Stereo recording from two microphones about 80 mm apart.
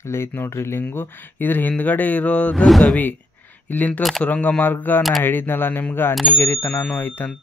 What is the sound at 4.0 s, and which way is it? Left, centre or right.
Speech, centre.